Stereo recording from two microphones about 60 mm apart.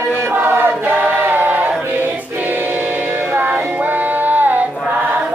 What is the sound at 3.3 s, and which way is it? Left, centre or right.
Music, right.